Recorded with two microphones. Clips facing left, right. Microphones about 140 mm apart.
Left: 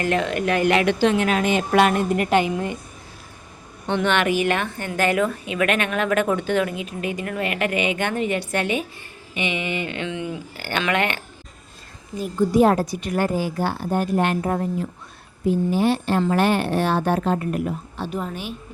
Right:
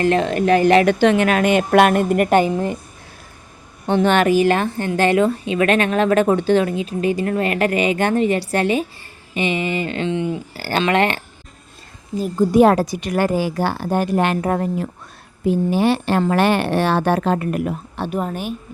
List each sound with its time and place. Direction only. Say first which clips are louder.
0.0 s a woman's voice: right 5 dB; 30° right (ahead or behind)
0.9 s a woman's voice: right 4 dB; 70° right (ahead or behind); by 2.5 s 50° right (ahead or behind)
3.8 s a woman's voice: right 5 dB; 40° right (ahead or behind)
12.5 s a woman's voice: right 4 dB; 80° right; by 18.5 s 50° right (ahead or behind)